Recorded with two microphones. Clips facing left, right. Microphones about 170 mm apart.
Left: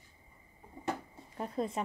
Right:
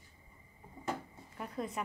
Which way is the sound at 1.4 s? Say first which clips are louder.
Left 4 dB; 30° left (ahead or behind).